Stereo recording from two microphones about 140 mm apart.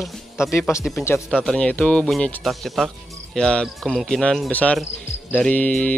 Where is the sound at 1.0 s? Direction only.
20° left (ahead or behind).